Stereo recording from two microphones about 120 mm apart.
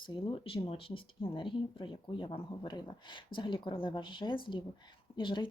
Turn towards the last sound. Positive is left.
turn(degrees=40)  # may be behind; listen again after turning